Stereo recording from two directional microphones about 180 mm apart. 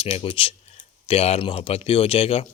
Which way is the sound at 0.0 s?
30° left (ahead or behind).